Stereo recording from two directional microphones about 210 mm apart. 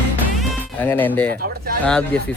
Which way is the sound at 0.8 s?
10° left (ahead or behind).